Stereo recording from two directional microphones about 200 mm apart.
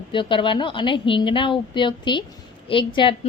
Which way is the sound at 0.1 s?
25° left (ahead or behind).